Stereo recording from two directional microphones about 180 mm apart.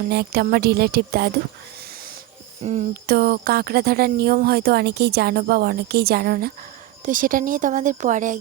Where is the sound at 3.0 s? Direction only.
60° right (ahead or behind).